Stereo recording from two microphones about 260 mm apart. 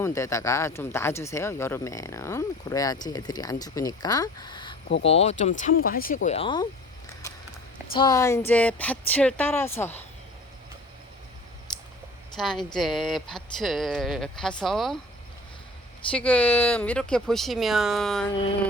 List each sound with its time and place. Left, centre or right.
0.0 s speech: centre; by 6.1 s left
6.2 s speech: left
7.9 s speech: centre
12.4 s speech: centre
16.1 s speech: centre